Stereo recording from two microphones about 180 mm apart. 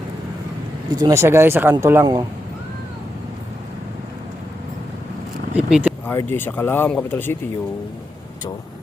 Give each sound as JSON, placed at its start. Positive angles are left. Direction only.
{"t": 0.9, "sound": "speech", "side_deg": -20}
{"t": 5.5, "sound": "a sound", "side_deg": -5}
{"t": 6.1, "sound": "speech", "side_deg": 10}